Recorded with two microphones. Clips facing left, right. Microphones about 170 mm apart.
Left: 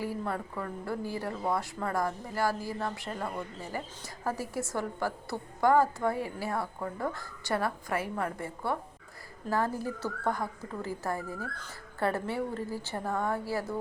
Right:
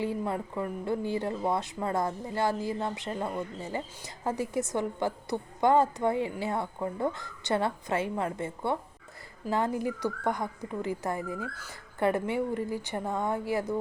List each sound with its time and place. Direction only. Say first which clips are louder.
0.0 s a woman's voice: right 3 dB; 20° right (ahead or behind)